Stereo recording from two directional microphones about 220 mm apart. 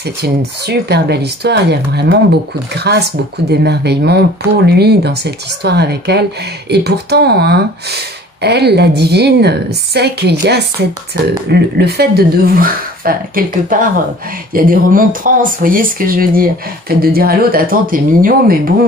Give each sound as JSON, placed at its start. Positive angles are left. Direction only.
{"t": 0.2, "sound": "speech", "side_deg": -50}